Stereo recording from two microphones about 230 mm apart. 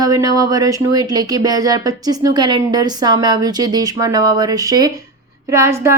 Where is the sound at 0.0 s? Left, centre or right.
Centre.